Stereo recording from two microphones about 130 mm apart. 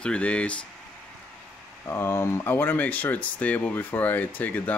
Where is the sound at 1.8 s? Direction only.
20° left (ahead or behind).